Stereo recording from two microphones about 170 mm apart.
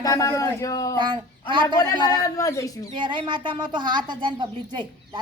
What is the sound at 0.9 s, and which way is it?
Speech, 25° right (ahead or behind).